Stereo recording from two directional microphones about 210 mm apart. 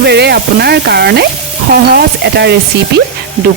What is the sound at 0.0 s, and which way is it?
Frying, 50° right (ahead or behind).